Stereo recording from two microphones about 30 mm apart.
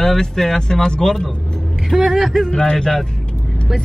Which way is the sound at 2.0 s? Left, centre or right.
Centre.